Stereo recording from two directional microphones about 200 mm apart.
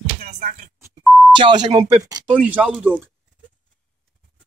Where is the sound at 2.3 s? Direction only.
5° right (ahead or behind).